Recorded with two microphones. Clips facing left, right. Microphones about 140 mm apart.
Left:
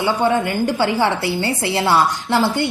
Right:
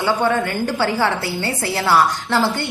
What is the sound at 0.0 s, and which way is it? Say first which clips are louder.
A woman's voice: left 1 dB; 20° left (ahead or behind).